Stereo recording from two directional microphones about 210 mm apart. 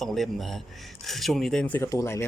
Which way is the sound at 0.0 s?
Centre (ahead or behind).